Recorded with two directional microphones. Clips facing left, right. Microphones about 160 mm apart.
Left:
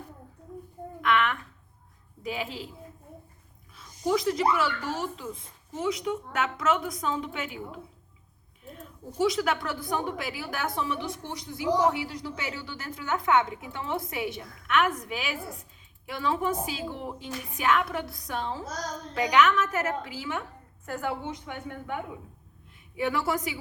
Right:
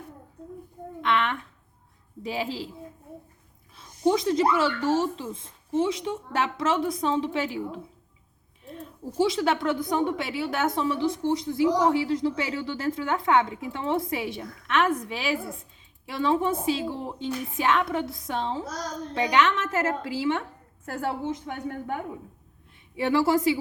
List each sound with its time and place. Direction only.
1.0 s a woman's voice: 30° right (ahead or behind)
3.8 s speech: 25° right (ahead or behind)
9.1 s a woman's voice: 25° right (ahead or behind)
23.0 s speech: 25° right (ahead or behind)